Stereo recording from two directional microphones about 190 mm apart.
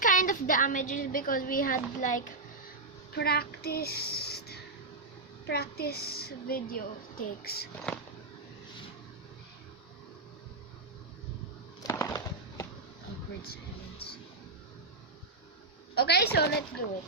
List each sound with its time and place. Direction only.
0.0 s a woman's voice: 45° left (ahead or behind)
3.1 s child singing: 55° left (ahead or behind)
5.5 s a woman's voice: 55° left (ahead or behind)
11.8 s a sound: 15° left (ahead or behind)
16.0 s a woman's voice: 60° left (ahead or behind)